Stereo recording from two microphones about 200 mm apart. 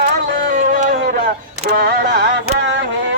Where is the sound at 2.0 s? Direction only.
55° right (ahead or behind).